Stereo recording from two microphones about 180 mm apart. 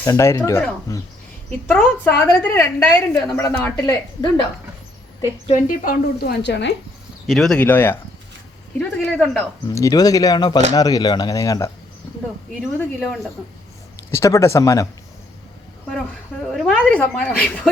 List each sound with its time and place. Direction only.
0.0 s a woman's voice: 15° left (ahead or behind)
1.7 s a woman's voice: 5° left (ahead or behind)
5.5 s a woman's voice: 50° left (ahead or behind); by 6.7 s 75° left (ahead or behind)
7.3 s a woman's voice: centre (ahead or behind)
9.6 s speech: 20° left (ahead or behind)
12.8 s a woman's voice: 10° left (ahead or behind)
16.5 s a woman's voice: centre (ahead or behind)